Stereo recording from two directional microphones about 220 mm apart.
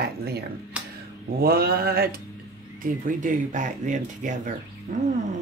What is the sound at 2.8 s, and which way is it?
Speech, 35° right (ahead or behind).